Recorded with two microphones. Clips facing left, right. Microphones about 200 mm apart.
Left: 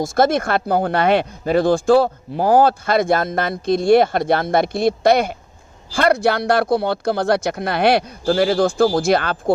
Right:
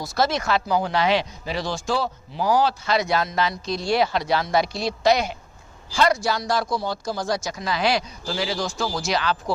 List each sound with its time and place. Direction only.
0.0 s speech: 50° left (ahead or behind)